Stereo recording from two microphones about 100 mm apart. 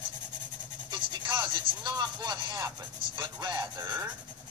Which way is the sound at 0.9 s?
50° right (ahead or behind).